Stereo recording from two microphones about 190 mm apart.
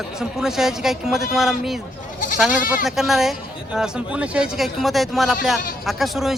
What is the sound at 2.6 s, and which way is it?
Speech, 45° left (ahead or behind).